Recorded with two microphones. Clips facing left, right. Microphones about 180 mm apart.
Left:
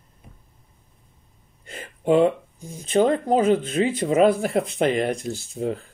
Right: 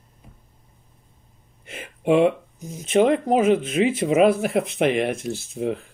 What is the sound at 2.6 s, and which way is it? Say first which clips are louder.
Speech: right 1 dB; 25° right (ahead or behind).